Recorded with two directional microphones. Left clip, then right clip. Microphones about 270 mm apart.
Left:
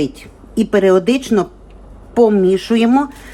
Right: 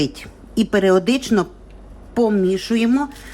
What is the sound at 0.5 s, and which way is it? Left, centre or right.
Speech, centre.